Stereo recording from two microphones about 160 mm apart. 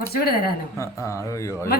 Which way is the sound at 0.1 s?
75° left (ahead or behind).